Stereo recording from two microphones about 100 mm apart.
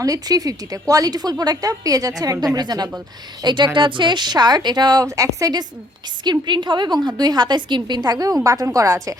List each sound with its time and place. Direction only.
0.0 s a woman's voice: 40° right (ahead or behind)
6.4 s a woman's voice: 50° right (ahead or behind); by 9.1 s 30° right (ahead or behind)